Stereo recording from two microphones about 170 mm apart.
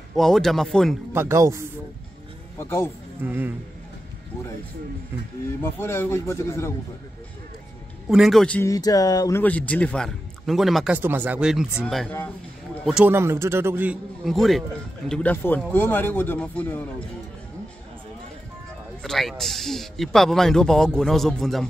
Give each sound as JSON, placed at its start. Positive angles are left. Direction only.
{"t": 0.1, "sound": "a man's voice", "side_deg": 0}
{"t": 1.1, "sound": "a man's voice", "side_deg": -15}
{"t": 2.6, "sound": "a man's voice", "side_deg": 15}
{"t": 3.3, "sound": "a man's voice", "side_deg": -10}
{"t": 5.6, "sound": "a man's voice", "side_deg": 15}
{"t": 8.1, "sound": "a man's voice", "side_deg": 0}
{"t": 8.6, "sound": "speech", "side_deg": 20}
{"t": 9.4, "sound": "a man's voice", "side_deg": 10}
{"t": 11.0, "sound": "a man's voice", "side_deg": -10}
{"t": 12.8, "sound": "a man's voice", "side_deg": -5}
{"t": 14.2, "sound": "a man's voice", "side_deg": 0}
{"t": 19.0, "sound": "a man's voice", "side_deg": 0}